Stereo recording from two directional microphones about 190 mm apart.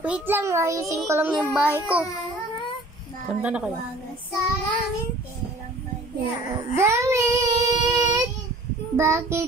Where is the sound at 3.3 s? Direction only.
5° right (ahead or behind).